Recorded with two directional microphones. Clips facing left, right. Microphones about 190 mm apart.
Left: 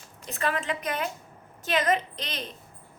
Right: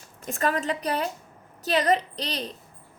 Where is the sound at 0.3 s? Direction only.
45° right (ahead or behind).